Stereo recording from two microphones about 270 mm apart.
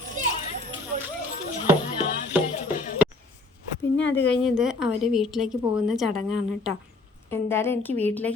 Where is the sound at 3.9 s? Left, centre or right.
Left.